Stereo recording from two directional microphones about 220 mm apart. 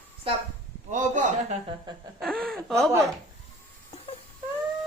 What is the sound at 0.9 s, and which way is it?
Speech, 35° right (ahead or behind).